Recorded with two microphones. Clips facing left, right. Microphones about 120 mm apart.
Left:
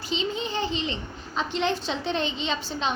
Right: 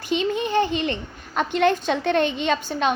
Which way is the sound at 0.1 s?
55° right (ahead or behind).